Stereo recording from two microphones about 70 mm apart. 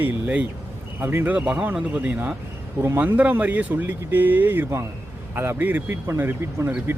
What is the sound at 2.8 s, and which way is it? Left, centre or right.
Speech, right.